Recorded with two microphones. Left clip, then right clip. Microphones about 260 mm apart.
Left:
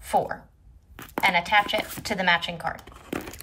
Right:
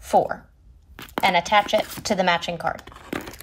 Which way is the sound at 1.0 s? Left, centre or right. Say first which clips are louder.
Right 2 dB; centre.